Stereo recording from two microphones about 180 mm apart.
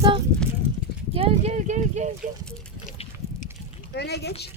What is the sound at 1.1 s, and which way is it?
Speech, 35° right (ahead or behind).